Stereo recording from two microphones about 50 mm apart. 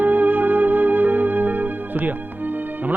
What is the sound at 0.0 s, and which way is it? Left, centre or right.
Music, right.